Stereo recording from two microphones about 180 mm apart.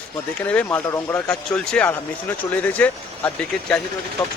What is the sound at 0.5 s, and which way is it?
Speech, 10° left (ahead or behind).